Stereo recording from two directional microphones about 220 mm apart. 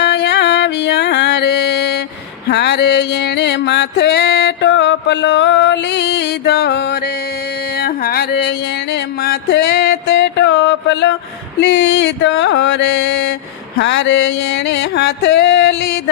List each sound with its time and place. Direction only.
0.0 s music: 50° left (ahead or behind)
11.6 s mantra: 55° left (ahead or behind)
13.7 s music: 55° left (ahead or behind)